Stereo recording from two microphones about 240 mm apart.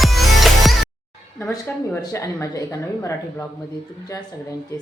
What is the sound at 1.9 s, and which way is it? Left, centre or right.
A woman's voice, centre.